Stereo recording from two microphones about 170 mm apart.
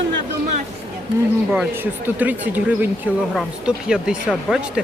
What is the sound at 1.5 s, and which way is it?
Speech, 10° right (ahead or behind).